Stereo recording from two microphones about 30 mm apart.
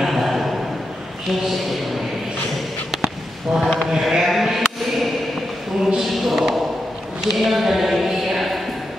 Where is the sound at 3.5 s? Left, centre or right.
Right.